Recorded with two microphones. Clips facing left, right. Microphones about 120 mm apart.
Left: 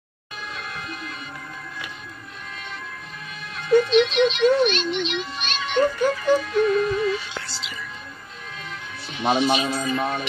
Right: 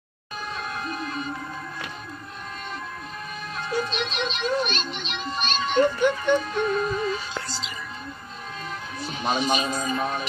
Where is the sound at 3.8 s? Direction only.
40° right (ahead or behind).